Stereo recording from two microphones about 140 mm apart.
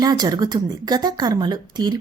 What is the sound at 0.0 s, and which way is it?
A woman's voice, 30° right (ahead or behind).